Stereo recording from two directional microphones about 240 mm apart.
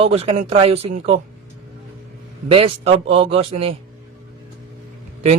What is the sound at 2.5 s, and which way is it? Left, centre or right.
Speech, right.